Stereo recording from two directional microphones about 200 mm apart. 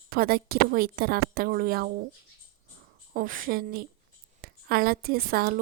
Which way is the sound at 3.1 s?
40° right (ahead or behind).